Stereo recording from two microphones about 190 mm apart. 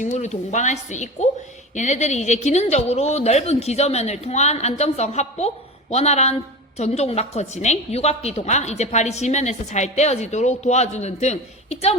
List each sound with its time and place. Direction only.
0.0 s a woman's voice: 35° left (ahead or behind)